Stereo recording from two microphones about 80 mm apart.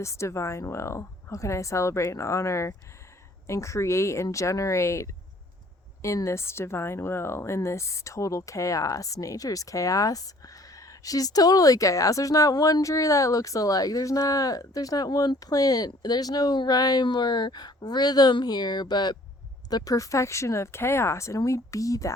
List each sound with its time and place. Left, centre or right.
0.0 s speech: left
6.2 s speech: left
19.7 s speech: left